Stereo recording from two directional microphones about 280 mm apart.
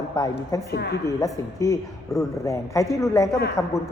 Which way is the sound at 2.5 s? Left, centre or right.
Centre.